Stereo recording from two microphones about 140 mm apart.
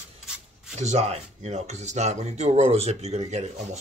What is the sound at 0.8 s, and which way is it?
Speech, 50° right (ahead or behind).